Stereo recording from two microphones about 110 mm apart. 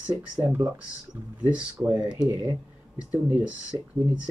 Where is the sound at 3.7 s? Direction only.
40° right (ahead or behind).